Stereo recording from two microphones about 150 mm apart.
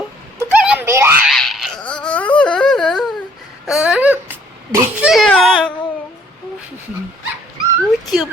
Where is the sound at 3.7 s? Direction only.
5° right (ahead or behind).